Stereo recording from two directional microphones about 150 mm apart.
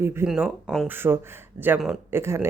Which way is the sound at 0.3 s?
5° right (ahead or behind).